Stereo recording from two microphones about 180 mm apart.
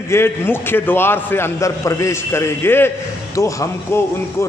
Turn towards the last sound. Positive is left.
turn(degrees=15)  # may be behind; listen again after turning